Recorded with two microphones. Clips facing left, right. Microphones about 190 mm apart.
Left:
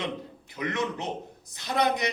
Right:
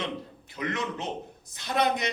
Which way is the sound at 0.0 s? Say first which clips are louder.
Left 1 dB; 20° left (ahead or behind).